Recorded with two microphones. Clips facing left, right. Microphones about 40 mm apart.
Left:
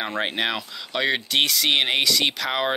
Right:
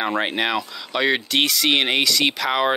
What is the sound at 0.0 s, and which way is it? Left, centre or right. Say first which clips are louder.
Speech: right 3 dB; centre.